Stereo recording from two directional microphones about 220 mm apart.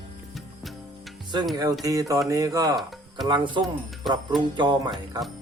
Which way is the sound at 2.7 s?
Centre (ahead or behind).